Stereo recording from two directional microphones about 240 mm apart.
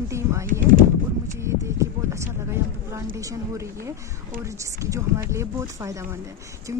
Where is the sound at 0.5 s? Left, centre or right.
Right.